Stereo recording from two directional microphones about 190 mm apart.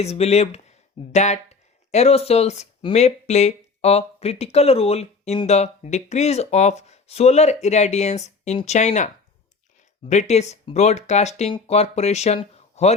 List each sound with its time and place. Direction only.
0.0 s speech: 35° left (ahead or behind)
10.1 s speech: 35° left (ahead or behind)